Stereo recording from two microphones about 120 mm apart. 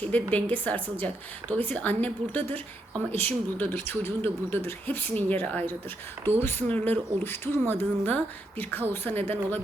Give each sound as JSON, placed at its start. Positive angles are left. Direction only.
{"t": 0.0, "sound": "a woman's voice", "side_deg": 10}